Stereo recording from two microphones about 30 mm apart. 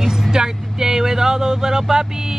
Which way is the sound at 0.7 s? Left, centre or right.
Centre.